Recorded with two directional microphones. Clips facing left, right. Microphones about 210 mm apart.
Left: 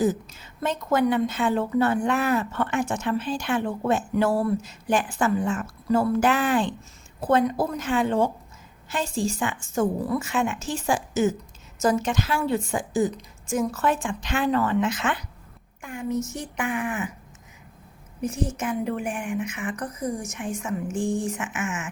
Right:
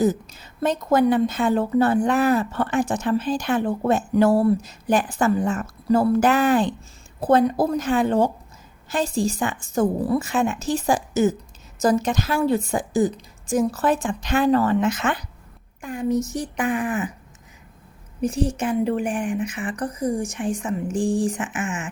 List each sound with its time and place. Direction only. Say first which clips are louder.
0.0 s a woman's voice: right 3 dB; 40° right (ahead or behind)
18.2 s a woman's voice: right 5 dB; 35° right (ahead or behind)